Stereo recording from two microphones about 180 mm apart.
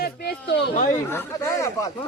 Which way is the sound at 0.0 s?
60° left (ahead or behind).